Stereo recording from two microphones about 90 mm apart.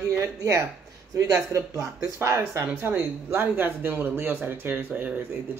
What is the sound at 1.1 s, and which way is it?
Speech, 35° right (ahead or behind).